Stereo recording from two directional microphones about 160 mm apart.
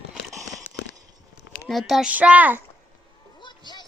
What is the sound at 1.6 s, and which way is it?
Speech, centre (ahead or behind).